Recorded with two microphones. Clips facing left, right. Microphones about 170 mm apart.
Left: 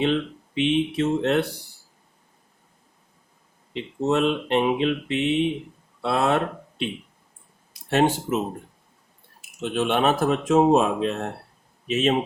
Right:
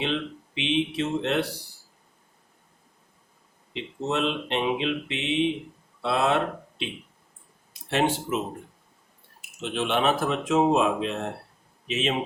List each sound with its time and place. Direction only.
0.0 s speech: 45° left (ahead or behind)
3.7 s speech: 45° left (ahead or behind)
9.6 s speech: 45° left (ahead or behind)